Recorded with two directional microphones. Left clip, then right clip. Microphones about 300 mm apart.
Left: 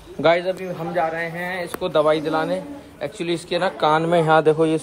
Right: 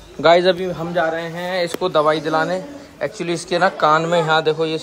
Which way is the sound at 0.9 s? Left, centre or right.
Centre.